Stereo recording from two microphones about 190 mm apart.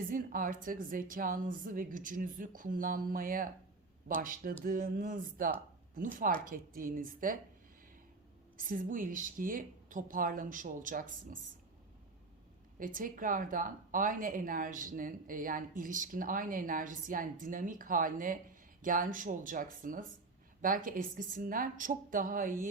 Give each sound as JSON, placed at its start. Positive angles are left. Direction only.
{"t": 0.1, "sound": "speech", "side_deg": -45}
{"t": 8.5, "sound": "speech", "side_deg": -45}
{"t": 12.8, "sound": "speech", "side_deg": -45}